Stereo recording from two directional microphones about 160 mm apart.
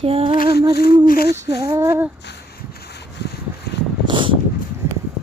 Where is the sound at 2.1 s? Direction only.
90° left.